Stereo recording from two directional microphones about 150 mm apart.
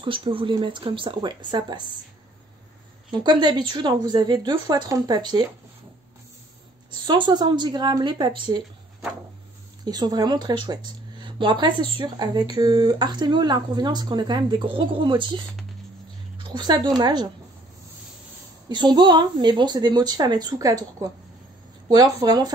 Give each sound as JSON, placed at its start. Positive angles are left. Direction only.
{"t": 0.0, "sound": "speech", "side_deg": -35}
{"t": 3.1, "sound": "speech", "side_deg": -30}
{"t": 7.1, "sound": "speech", "side_deg": -30}
{"t": 9.8, "sound": "speech", "side_deg": -25}
{"t": 18.7, "sound": "speech", "side_deg": -30}